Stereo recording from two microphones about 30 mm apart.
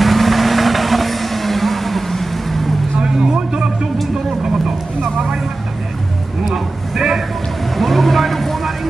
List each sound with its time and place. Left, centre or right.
0.0 s vehicle: centre
3.0 s vehicle: right
6.4 s a sound: centre
7.7 s vehicle: centre